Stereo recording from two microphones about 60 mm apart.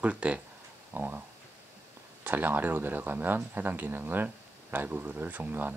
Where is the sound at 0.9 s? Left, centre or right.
Right.